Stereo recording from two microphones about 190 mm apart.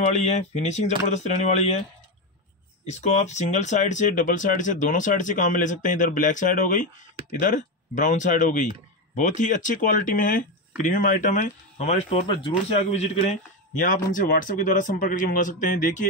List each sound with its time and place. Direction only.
0.1 s speech: 35° left (ahead or behind)
2.8 s a man's voice: 40° left (ahead or behind)